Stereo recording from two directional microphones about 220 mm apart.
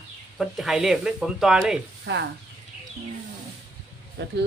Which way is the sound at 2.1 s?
50° right (ahead or behind).